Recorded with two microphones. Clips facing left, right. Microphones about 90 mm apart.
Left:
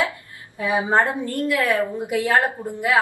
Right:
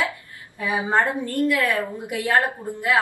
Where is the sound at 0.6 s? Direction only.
20° left (ahead or behind).